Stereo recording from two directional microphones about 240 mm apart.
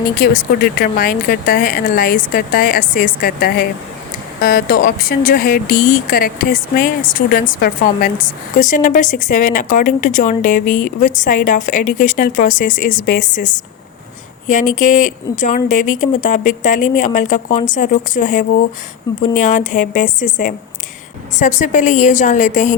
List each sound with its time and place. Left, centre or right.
0.2 s speech: left
15.4 s speech: left
19.1 s speech: centre
19.4 s speech: left